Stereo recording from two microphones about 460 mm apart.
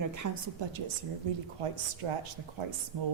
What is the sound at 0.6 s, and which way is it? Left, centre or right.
Speech, right.